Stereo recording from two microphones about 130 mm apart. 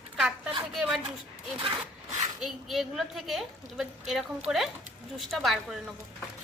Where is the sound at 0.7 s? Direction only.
5° right (ahead or behind).